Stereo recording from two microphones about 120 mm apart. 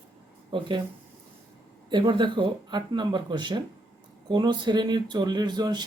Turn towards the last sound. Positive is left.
turn(degrees=-35)  # may be behind; listen again after turning